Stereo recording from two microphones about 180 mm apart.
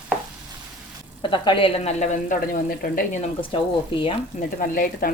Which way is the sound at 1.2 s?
25° left (ahead or behind).